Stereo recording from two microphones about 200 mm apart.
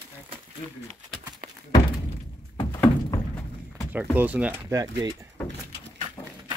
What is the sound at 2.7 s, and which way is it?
Thunk, 15° left (ahead or behind).